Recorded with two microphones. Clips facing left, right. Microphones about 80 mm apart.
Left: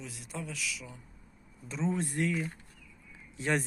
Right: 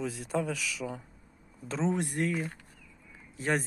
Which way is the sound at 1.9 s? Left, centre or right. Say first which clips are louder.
Right 2 dB; right.